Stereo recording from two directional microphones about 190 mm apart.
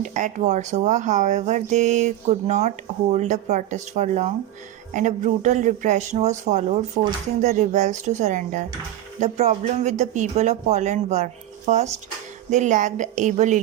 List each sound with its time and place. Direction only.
0.0 s speech: 40° right (ahead or behind)